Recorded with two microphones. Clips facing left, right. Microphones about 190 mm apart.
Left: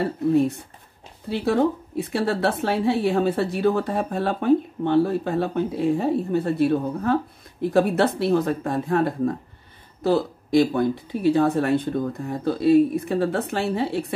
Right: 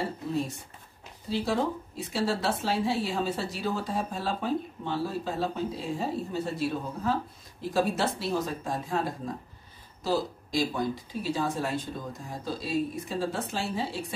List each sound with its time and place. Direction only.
0.0 s speech: 60° left (ahead or behind)